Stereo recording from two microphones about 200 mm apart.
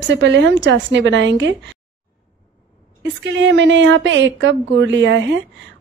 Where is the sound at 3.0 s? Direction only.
65° right (ahead or behind).